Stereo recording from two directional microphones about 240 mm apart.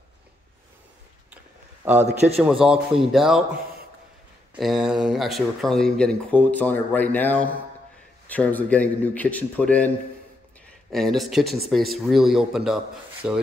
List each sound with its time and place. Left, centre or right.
2.1 s a man's voice: right
2.6 s speech: centre
4.6 s a man's voice: centre